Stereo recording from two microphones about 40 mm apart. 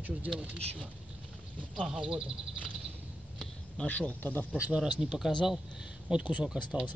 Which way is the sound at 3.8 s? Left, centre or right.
Left.